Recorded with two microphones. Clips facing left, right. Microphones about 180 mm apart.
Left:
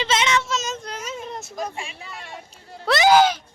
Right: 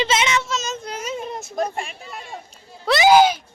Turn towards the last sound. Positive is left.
turn(degrees=-10)  # may be behind; listen again after turning